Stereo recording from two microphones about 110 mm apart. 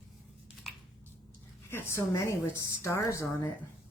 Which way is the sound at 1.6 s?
20° left (ahead or behind).